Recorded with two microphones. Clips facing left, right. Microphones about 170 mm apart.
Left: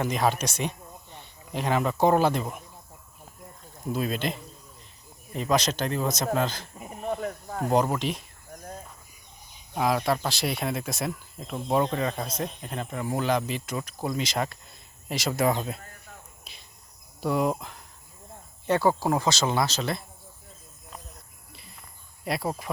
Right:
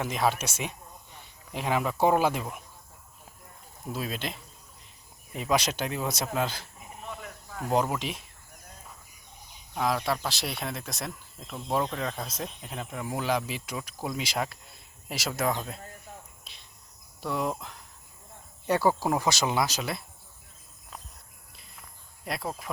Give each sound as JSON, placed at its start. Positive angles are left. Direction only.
{"t": 0.0, "sound": "speech", "side_deg": 0}
{"t": 3.8, "sound": "speech", "side_deg": 0}
{"t": 7.0, "sound": "snake", "side_deg": 45}
{"t": 7.7, "sound": "speech", "side_deg": 0}
{"t": 9.7, "sound": "speech", "side_deg": 0}
{"t": 16.4, "sound": "cricket", "side_deg": 5}
{"t": 17.2, "sound": "speech", "side_deg": 5}
{"t": 19.3, "sound": "speech", "side_deg": -15}
{"t": 21.5, "sound": "cricket", "side_deg": 0}